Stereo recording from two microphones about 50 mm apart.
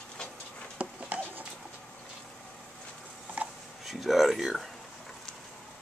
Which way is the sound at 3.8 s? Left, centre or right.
Centre.